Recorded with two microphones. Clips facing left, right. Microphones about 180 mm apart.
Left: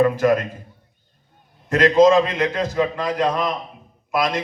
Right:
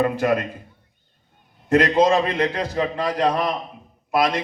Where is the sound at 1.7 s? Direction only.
35° right (ahead or behind).